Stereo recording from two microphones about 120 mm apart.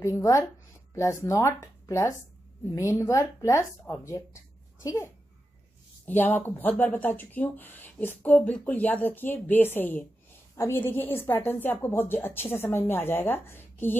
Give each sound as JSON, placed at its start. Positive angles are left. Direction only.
{"t": 0.0, "sound": "a woman's voice", "side_deg": 25}